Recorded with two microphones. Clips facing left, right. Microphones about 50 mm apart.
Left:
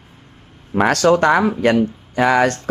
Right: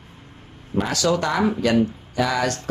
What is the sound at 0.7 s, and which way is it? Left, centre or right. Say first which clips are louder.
Speech: left 7 dB; left.